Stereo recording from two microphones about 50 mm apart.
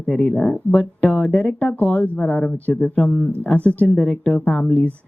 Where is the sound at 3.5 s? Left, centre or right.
Left.